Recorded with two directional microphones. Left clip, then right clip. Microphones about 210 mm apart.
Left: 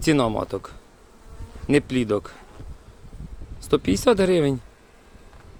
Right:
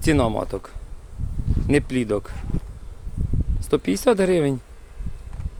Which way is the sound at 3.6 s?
5° right (ahead or behind).